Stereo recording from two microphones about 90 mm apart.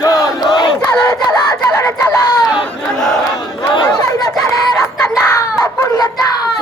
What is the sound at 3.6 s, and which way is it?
Chatter, 55° left (ahead or behind).